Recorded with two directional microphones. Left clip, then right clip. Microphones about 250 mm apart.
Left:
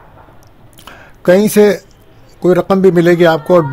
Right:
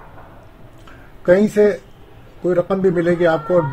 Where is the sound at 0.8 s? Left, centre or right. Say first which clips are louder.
Left 5 dB; left.